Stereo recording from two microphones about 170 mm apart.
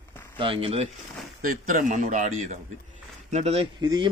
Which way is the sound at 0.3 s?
30° right (ahead or behind).